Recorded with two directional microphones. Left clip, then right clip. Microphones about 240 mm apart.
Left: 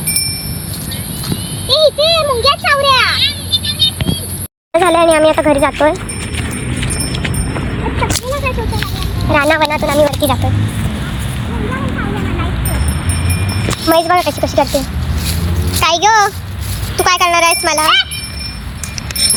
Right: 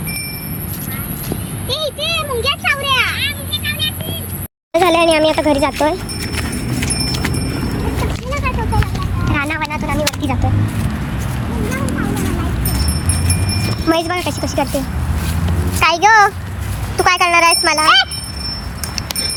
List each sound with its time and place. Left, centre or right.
1.6 s vehicle: centre
3.2 s vehicle: centre
4.7 s a sound: centre
8.4 s a sound: centre
9.3 s speech: centre
13.8 s speech: left
15.8 s speech: centre